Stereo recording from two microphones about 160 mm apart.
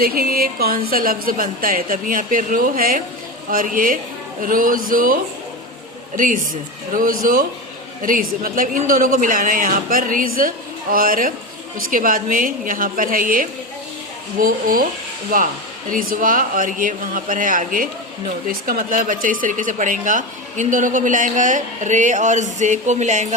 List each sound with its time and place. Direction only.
0.0 s a woman's voice: 65° right (ahead or behind); by 23.3 s 50° right (ahead or behind)